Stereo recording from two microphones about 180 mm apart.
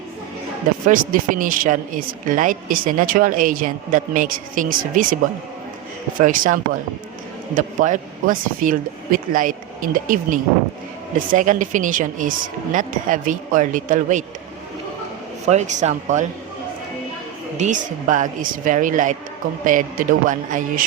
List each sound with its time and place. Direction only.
0.9 s speech: 50° right (ahead or behind)
6.1 s speech: 50° right (ahead or behind)
15.4 s speech: 40° right (ahead or behind)
17.6 s speech: 45° right (ahead or behind)